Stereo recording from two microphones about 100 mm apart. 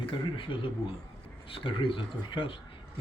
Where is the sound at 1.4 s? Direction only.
60° left (ahead or behind).